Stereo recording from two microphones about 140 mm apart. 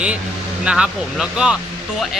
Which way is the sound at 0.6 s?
5° right (ahead or behind).